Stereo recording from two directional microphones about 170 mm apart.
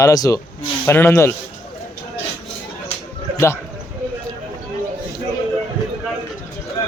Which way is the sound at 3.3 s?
15° left (ahead or behind).